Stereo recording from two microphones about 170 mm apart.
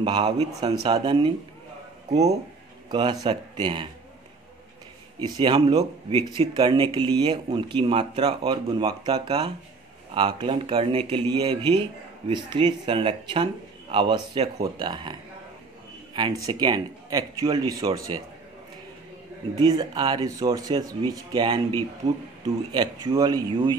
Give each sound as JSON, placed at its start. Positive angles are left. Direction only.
{"t": 0.0, "sound": "speech", "side_deg": -25}
{"t": 2.9, "sound": "a man's voice", "side_deg": -25}
{"t": 5.2, "sound": "speech", "side_deg": -25}
{"t": 19.5, "sound": "speech", "side_deg": -25}